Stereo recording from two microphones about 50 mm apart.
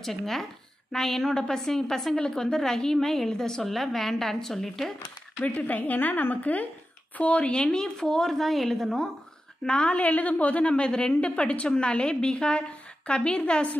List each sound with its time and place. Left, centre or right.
0.0 s a woman's voice: centre
5.4 s a woman's voice: left; by 9.1 s centre
9.7 s a woman's voice: left